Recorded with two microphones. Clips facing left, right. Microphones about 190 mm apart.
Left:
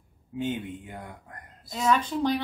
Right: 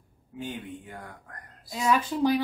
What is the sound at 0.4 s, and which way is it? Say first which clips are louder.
Speech: left 5 dB; 20° left (ahead or behind).